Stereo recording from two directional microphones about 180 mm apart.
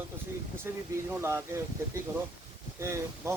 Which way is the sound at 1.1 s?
15° right (ahead or behind).